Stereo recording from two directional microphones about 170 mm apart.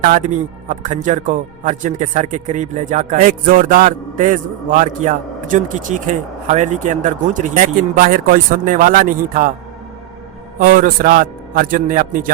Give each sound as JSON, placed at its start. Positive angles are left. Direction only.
{"t": 0.0, "sound": "a man's voice", "side_deg": -50}
{"t": 10.6, "sound": "a man's voice", "side_deg": -55}